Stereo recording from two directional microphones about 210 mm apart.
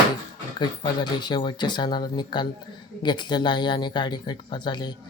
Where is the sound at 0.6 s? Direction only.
20° left (ahead or behind).